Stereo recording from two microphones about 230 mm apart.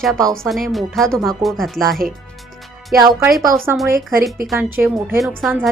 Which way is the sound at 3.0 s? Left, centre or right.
Centre.